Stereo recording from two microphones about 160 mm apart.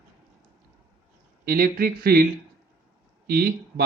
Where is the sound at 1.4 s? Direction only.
70° right (ahead or behind).